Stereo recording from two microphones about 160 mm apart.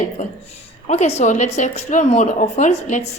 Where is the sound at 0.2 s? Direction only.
40° left (ahead or behind).